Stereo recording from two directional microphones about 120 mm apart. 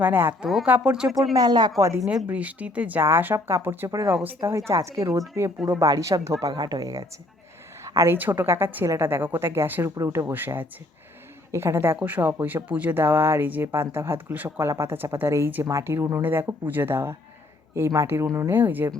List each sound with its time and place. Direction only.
0.0 s speech: 15° right (ahead or behind)
0.4 s speech: centre (ahead or behind)
1.3 s speech: 35° right (ahead or behind)
1.8 s a woman's voice: 25° right (ahead or behind)
2.2 s a woman's voice: 10° right (ahead or behind)